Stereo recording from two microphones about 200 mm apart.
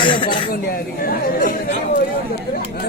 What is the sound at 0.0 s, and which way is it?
Speech, 25° left (ahead or behind).